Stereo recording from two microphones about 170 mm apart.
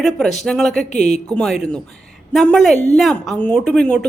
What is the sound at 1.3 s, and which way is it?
A woman's voice, 5° left (ahead or behind).